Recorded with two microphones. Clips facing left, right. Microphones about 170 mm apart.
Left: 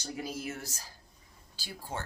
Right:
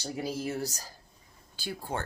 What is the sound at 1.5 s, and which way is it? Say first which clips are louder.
Speech: right 5 dB; 55° right (ahead or behind).